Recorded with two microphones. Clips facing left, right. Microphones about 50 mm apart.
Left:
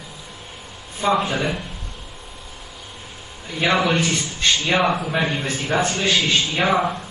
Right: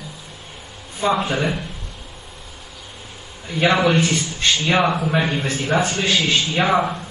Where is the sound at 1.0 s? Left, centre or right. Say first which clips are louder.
Even; centre.